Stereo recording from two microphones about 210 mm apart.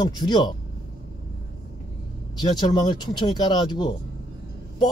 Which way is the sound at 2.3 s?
20° left (ahead or behind).